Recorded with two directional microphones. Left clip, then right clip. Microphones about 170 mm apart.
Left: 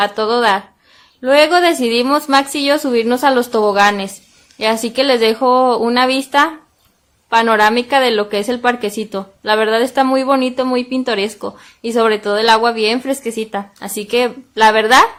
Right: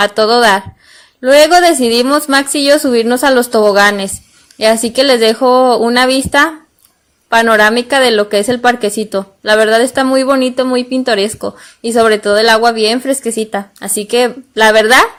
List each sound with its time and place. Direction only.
0.0 s a woman's voice: 30° right (ahead or behind)